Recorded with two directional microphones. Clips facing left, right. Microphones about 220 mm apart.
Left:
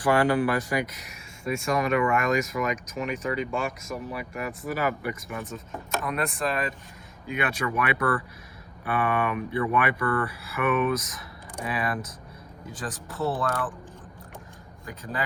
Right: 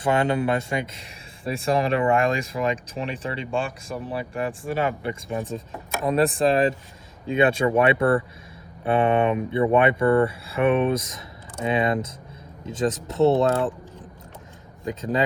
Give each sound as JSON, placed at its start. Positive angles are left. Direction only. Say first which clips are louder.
{"t": 0.0, "sound": "speech", "louder": "even", "side_deg": -25}
{"t": 14.8, "sound": "speech", "louder": "right 10 dB", "side_deg": -20}